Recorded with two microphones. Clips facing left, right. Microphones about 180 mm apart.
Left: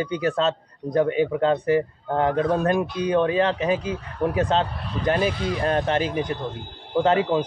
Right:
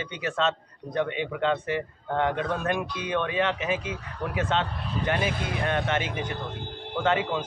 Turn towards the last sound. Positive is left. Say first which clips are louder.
# left 6 dB
turn(degrees=35)  # may be behind; listen again after turning